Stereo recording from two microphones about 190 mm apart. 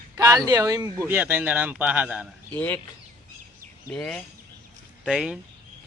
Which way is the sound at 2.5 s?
10° left (ahead or behind).